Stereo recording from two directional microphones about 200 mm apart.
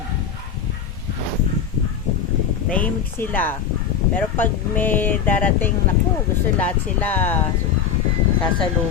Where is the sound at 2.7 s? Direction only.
10° left (ahead or behind).